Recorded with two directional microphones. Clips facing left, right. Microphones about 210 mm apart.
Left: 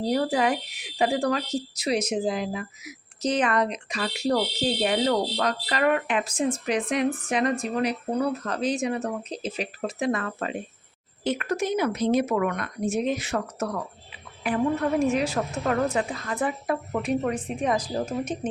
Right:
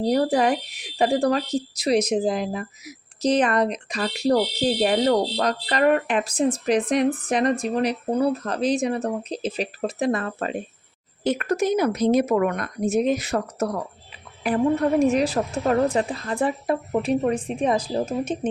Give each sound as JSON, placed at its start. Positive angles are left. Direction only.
{"t": 0.1, "sound": "a woman's voice", "side_deg": -40}